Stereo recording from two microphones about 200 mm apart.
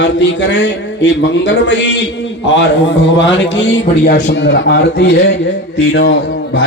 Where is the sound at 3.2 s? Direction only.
60° left (ahead or behind).